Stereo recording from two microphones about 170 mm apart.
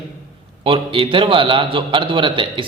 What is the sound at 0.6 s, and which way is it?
A man's voice, 30° right (ahead or behind).